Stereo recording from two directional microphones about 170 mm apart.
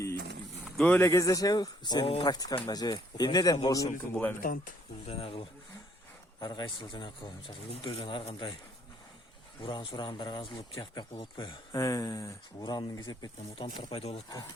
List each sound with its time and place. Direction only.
0.9 s speech: 15° left (ahead or behind)
4.1 s speech: 10° left (ahead or behind)
4.4 s speech: 55° left (ahead or behind)
5.0 s speech: 35° left (ahead or behind)
9.6 s speech: 25° left (ahead or behind)